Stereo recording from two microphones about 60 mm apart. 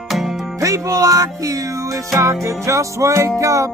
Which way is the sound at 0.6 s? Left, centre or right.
Right.